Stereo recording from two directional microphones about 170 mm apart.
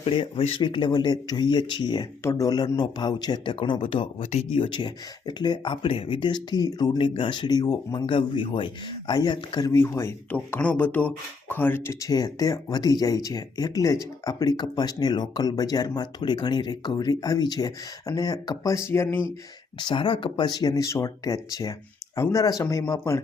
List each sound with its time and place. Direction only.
0.0 s speech: 30° left (ahead or behind)
4.2 s speech: 40° left (ahead or behind); by 19.2 s 15° left (ahead or behind)
19.8 s speech: 30° left (ahead or behind)
22.6 s speech: 10° left (ahead or behind)